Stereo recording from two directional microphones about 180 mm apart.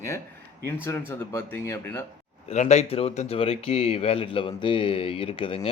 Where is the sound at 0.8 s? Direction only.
10° left (ahead or behind).